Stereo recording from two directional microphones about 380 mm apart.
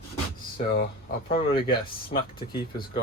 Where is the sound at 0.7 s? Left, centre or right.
Left.